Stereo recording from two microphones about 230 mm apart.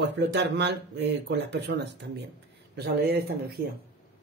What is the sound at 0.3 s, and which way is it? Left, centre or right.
Speech, right.